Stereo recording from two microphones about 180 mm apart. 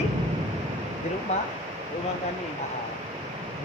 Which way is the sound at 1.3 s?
40° left (ahead or behind).